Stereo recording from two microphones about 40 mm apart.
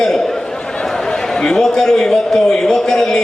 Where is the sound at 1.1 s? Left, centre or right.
Centre.